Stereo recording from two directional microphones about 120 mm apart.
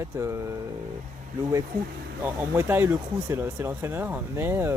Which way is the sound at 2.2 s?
20° right (ahead or behind).